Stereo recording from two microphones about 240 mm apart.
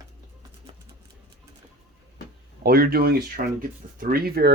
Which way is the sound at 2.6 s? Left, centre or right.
Right.